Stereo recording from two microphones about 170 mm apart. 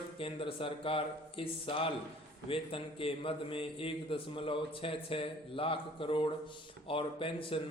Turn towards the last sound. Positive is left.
turn(degrees=30)  # may be behind; listen again after turning